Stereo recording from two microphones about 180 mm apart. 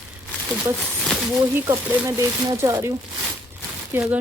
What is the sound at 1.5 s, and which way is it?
Speech, 15° right (ahead or behind).